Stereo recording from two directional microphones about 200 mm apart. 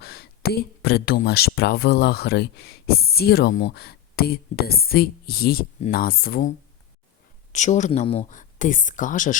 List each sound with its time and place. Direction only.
0.0 s speech: 50° left (ahead or behind)
7.5 s speech: 35° left (ahead or behind)